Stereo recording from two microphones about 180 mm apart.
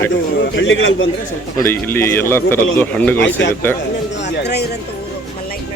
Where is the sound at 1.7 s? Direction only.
10° left (ahead or behind).